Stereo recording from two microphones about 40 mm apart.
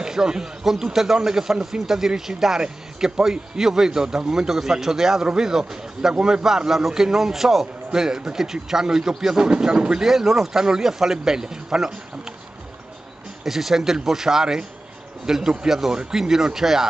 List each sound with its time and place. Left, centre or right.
0.0 s a man's voice: centre
10.0 s a man's voice: centre
13.4 s a man's voice: centre